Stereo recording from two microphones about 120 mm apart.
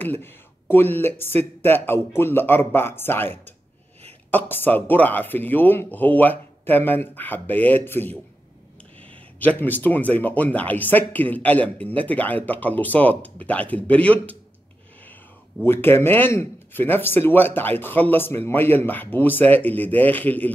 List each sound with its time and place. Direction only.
0.0 s speech: 15° left (ahead or behind)
15.6 s speech: 20° left (ahead or behind)